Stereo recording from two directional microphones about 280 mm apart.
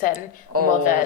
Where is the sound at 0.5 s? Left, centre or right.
Right.